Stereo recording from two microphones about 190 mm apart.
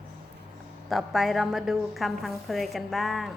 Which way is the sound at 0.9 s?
Centre (ahead or behind).